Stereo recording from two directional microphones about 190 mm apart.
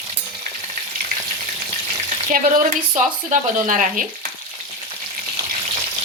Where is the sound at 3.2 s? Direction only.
40° right (ahead or behind).